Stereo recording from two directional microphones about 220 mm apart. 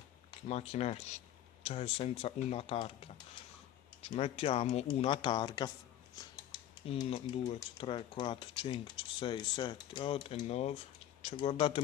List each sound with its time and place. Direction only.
0.3 s speech: 30° left (ahead or behind)
4.1 s speech: 25° left (ahead or behind)
6.9 s speech: 20° left (ahead or behind)